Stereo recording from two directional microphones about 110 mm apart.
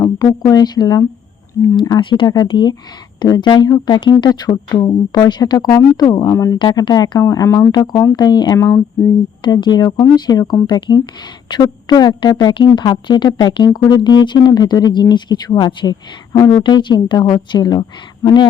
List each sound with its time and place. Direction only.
0.4 s speech: 35° left (ahead or behind)
6.3 s speech: 30° left (ahead or behind)
6.6 s speech: 40° left (ahead or behind)
7.2 s speech: 30° left (ahead or behind)
8.5 s speech: 25° left (ahead or behind)
9.4 s speech: 40° left (ahead or behind)